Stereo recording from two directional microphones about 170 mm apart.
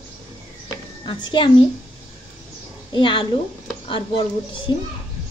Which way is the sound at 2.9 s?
30° left (ahead or behind).